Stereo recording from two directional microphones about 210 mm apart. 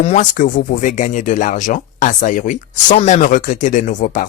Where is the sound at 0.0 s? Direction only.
35° left (ahead or behind).